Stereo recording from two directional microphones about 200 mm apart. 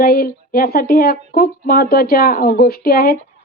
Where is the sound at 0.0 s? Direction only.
50° left (ahead or behind).